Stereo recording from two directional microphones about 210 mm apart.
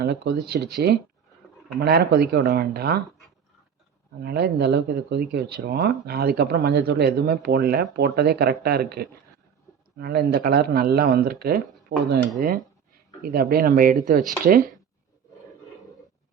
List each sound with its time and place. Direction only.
0.0 s speech: 50° right (ahead or behind)
1.8 s speech: 50° right (ahead or behind)
4.2 s speech: 50° right (ahead or behind)